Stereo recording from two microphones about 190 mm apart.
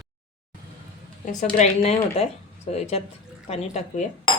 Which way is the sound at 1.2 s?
40° left (ahead or behind).